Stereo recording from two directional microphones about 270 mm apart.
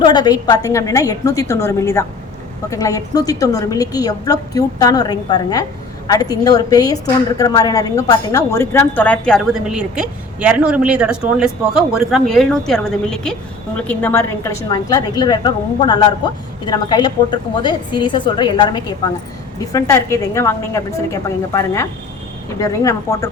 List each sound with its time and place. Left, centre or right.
0.0 s a woman's voice: centre